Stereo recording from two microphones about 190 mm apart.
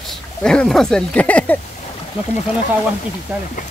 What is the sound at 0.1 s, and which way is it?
Speech, 5° left (ahead or behind).